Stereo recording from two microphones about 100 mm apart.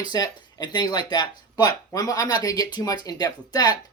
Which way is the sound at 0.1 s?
45° left (ahead or behind).